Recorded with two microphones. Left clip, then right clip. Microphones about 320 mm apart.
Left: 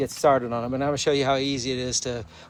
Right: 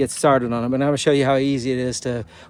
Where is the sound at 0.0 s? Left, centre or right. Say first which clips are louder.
Right 3 dB; right.